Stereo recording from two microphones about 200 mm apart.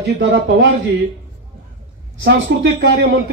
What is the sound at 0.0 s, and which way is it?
Speech, 65° right (ahead or behind).